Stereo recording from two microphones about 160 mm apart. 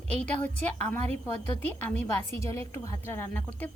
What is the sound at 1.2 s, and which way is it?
A woman's voice, 10° left (ahead or behind).